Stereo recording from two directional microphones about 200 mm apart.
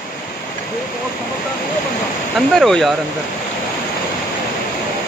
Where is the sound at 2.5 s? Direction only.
Centre (ahead or behind).